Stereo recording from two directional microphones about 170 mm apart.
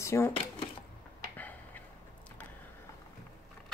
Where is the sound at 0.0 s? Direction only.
15° left (ahead or behind).